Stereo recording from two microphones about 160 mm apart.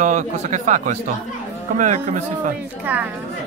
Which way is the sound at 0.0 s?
50° right (ahead or behind).